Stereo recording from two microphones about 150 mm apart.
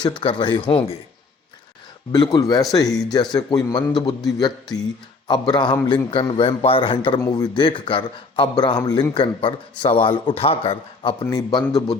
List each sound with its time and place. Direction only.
0.2 s a man's voice: 35° left (ahead or behind)
2.1 s a man's voice: 25° left (ahead or behind)
11.2 s speech: 25° left (ahead or behind)